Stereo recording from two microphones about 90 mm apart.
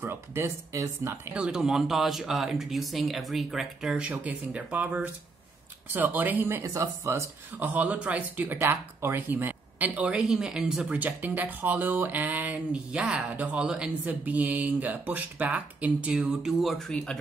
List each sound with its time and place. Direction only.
0.0 s speech: 25° right (ahead or behind)
1.3 s speech: 10° right (ahead or behind)
6.6 s speech: 35° right (ahead or behind)
7.5 s speech: 20° right (ahead or behind); by 17.2 s 5° left (ahead or behind)